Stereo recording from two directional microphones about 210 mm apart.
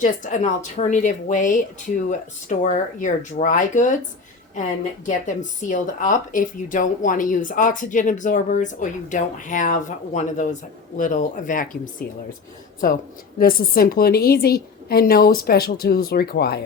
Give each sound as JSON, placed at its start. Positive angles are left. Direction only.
{"t": 0.0, "sound": "speech", "side_deg": 35}
{"t": 5.0, "sound": "speech", "side_deg": 35}
{"t": 13.4, "sound": "a woman's voice", "side_deg": 45}